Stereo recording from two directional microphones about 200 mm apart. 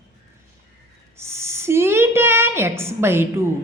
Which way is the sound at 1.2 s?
15° right (ahead or behind).